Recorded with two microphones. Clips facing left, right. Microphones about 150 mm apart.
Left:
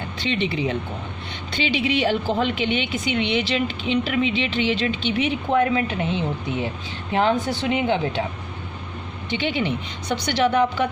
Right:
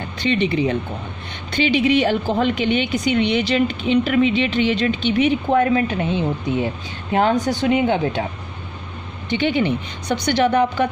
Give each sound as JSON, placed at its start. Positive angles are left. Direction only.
{"t": 0.2, "sound": "a woman's voice", "side_deg": -50}
{"t": 7.1, "sound": "a woman's voice", "side_deg": -45}
{"t": 9.3, "sound": "a woman's voice", "side_deg": -50}